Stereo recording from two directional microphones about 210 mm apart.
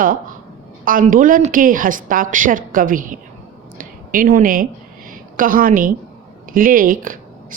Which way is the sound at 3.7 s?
40° right (ahead or behind).